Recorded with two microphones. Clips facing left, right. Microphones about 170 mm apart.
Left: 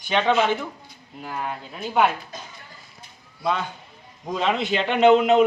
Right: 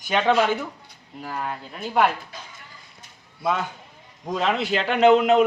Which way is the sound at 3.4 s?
5° right (ahead or behind).